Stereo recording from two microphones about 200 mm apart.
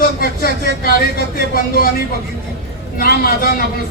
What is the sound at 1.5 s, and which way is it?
Speech, 45° left (ahead or behind).